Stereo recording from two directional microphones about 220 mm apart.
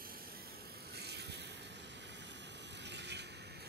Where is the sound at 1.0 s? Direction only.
50° right (ahead or behind).